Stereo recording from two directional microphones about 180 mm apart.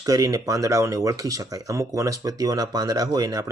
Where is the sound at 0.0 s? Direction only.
20° right (ahead or behind).